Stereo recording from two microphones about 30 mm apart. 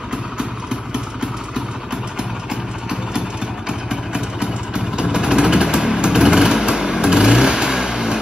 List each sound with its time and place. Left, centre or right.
0.4 s vehicle: right
3.6 s vehicle: right